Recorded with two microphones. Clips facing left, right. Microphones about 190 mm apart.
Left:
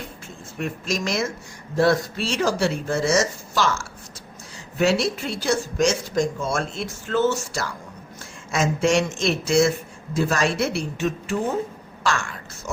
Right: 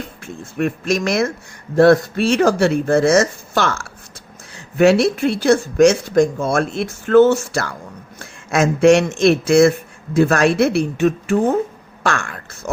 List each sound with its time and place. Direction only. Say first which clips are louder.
0.6 s speech: right 8 dB; 60° right (ahead or behind)